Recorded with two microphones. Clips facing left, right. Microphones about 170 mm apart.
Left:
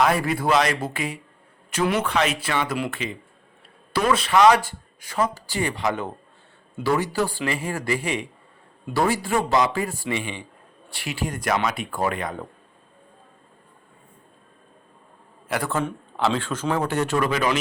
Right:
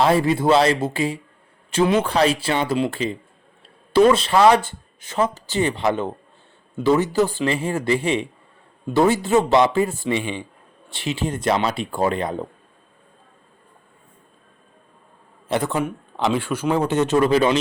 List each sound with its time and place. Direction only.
0.0 s speech: 25° right (ahead or behind)
15.4 s a man's voice: 20° right (ahead or behind)